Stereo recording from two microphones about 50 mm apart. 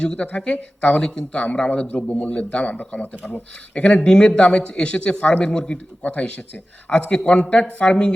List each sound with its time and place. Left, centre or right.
0.0 s a man's voice: left
3.8 s a man's voice: left